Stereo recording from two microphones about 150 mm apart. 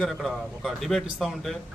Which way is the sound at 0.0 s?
Centre (ahead or behind).